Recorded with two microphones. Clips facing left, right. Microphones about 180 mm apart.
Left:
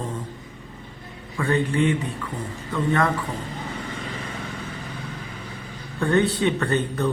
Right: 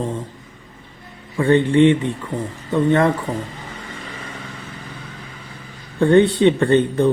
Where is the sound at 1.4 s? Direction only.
30° right (ahead or behind).